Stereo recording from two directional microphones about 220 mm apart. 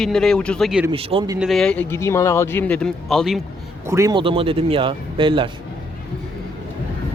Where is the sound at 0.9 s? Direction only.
25° right (ahead or behind).